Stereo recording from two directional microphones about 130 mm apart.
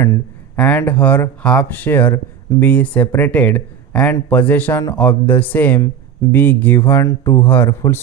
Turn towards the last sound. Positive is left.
turn(degrees=20)  # may be behind; listen again after turning